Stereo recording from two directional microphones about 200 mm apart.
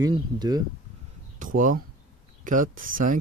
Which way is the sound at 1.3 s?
40° right (ahead or behind).